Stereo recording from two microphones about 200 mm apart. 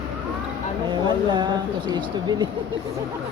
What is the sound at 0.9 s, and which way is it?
Speech, 20° right (ahead or behind).